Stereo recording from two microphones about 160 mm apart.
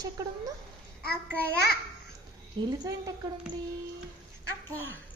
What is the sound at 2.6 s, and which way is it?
Speech, 25° right (ahead or behind).